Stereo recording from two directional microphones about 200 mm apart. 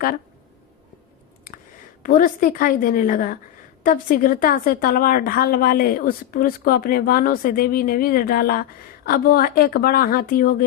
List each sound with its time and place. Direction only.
2.0 s a woman's voice: 40° left (ahead or behind)